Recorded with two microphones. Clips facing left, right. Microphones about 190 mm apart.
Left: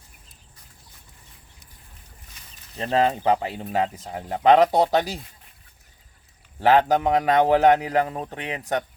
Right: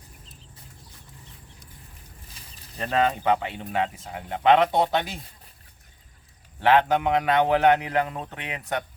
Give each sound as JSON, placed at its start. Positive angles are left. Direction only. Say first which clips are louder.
{"t": 2.4, "sound": "a sound", "louder": "right 2 dB", "side_deg": -30}
{"t": 2.7, "sound": "speech", "louder": "left 2 dB", "side_deg": 30}
{"t": 6.6, "sound": "speech", "louder": "left 2 dB", "side_deg": 40}